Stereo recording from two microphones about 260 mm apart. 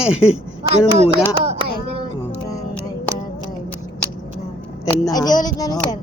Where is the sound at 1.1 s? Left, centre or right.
Right.